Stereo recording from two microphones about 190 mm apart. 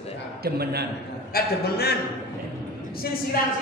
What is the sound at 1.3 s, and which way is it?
Speech, 55° left (ahead or behind).